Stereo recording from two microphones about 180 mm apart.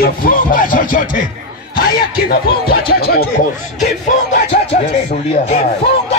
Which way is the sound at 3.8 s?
40° left (ahead or behind).